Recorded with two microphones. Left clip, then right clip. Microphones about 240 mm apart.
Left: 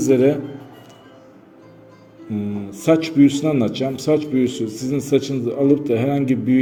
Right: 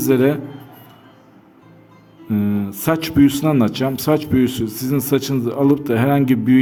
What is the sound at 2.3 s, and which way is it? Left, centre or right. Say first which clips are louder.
Speech: right 5 dB; right.